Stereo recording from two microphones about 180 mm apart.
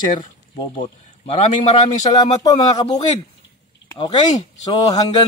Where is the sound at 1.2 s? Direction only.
35° left (ahead or behind).